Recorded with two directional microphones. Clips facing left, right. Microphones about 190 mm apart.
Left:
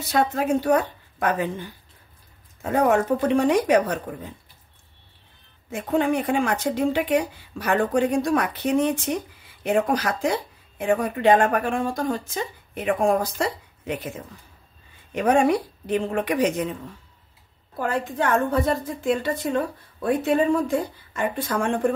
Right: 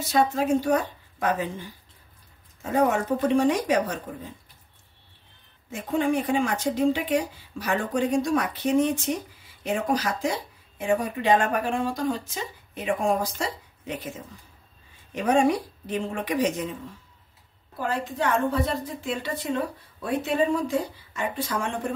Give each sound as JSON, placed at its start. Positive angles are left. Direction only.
{"t": 0.1, "sound": "speech", "side_deg": 60}
{"t": 5.7, "sound": "speech", "side_deg": 60}
{"t": 15.1, "sound": "speech", "side_deg": 60}
{"t": 17.7, "sound": "a woman's voice", "side_deg": 55}